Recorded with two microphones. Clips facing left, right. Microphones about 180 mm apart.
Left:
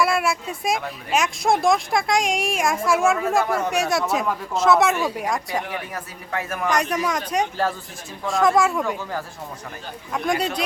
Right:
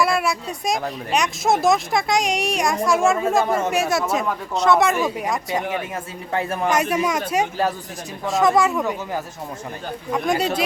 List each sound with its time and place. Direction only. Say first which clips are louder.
0.0 s speech: right 1 dB; centre (ahead or behind)
5.6 s speech: right 4 dB; 25° right (ahead or behind)
6.7 s speech: right 1 dB; 5° right (ahead or behind)
10.1 s speech: right 2 dB; centre (ahead or behind)